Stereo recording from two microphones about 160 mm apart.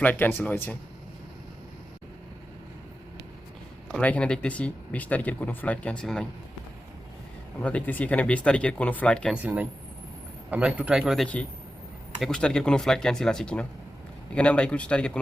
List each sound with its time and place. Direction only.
0.0 s speech: 10° left (ahead or behind)
3.9 s speech: 10° left (ahead or behind)
7.6 s speech: 10° left (ahead or behind)
9.3 s speech: 10° right (ahead or behind); by 15.2 s 5° left (ahead or behind)